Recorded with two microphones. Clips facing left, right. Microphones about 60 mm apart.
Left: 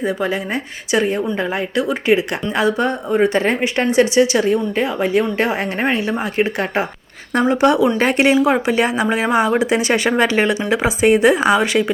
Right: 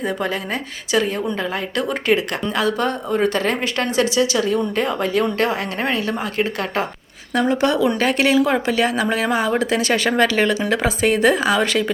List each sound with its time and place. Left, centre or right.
0.0 s speech: centre
1.7 s speech: centre
2.1 s speech: left
4.7 s speech: centre